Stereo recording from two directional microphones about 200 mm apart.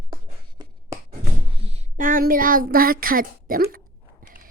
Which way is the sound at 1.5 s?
30° right (ahead or behind).